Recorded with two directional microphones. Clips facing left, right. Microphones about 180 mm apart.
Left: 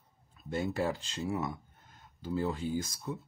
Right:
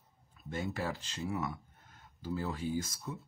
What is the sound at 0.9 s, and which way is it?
Speech, 25° left (ahead or behind).